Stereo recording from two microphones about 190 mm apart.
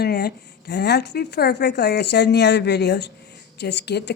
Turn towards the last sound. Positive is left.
turn(degrees=65)  # may be behind; listen again after turning